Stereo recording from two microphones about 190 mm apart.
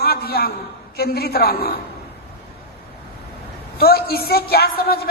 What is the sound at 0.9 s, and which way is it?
Speech, 55° left (ahead or behind).